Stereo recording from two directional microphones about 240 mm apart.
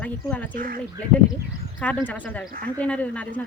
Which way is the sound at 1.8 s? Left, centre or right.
Centre.